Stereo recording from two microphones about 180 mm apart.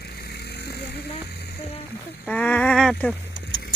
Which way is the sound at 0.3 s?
65° left (ahead or behind).